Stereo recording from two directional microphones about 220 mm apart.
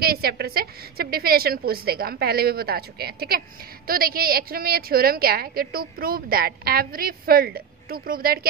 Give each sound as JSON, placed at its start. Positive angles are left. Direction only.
{"t": 0.0, "sound": "a woman's voice", "side_deg": -45}